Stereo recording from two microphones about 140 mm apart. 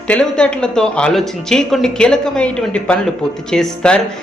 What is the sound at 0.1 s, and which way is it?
A man's voice, 10° left (ahead or behind).